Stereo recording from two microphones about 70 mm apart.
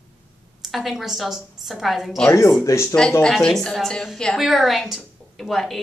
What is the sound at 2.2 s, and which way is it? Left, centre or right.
Speech, left.